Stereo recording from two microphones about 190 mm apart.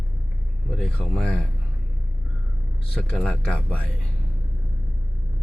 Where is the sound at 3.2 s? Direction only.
5° left (ahead or behind).